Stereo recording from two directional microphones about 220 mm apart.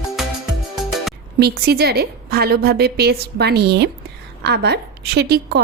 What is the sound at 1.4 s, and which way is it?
A woman's voice, 45° right (ahead or behind).